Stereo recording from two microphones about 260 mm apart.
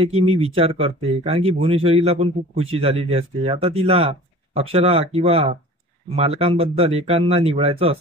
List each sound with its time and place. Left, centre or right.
0.0 s speech: right